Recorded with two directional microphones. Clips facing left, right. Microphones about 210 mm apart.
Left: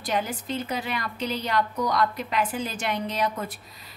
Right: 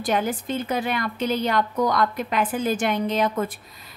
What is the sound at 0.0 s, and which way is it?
A woman's voice, 50° right (ahead or behind).